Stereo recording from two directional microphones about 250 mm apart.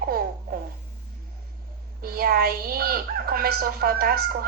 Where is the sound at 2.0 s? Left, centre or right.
Right.